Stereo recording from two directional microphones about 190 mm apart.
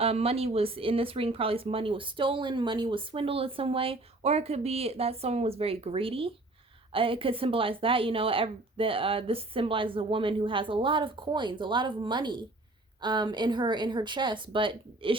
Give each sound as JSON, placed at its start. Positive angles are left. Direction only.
{"t": 0.0, "sound": "speech", "side_deg": -30}